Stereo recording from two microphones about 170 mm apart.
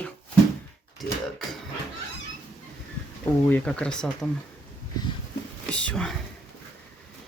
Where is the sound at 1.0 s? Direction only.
Centre (ahead or behind).